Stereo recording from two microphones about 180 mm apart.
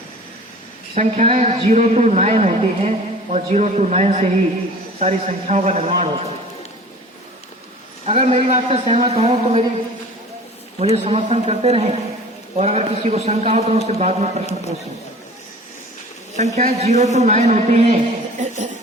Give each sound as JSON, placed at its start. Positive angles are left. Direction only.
{"t": 0.9, "sound": "a man's voice", "side_deg": -40}
{"t": 8.0, "sound": "a man's voice", "side_deg": -35}
{"t": 10.8, "sound": "a man's voice", "side_deg": -35}
{"t": 16.6, "sound": "a man's voice", "side_deg": -40}